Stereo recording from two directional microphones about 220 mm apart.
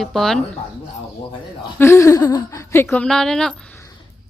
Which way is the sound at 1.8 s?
15° left (ahead or behind).